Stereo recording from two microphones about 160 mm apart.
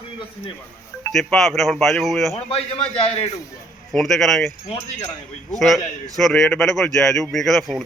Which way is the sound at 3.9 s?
Centre (ahead or behind).